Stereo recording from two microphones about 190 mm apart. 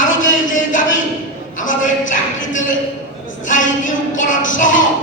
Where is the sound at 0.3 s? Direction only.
45° left (ahead or behind).